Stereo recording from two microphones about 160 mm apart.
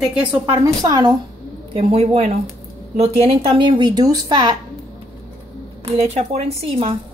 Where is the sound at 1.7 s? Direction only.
40° right (ahead or behind).